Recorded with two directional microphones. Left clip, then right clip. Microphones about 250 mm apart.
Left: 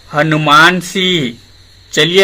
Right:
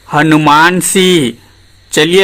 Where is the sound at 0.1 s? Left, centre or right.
Right.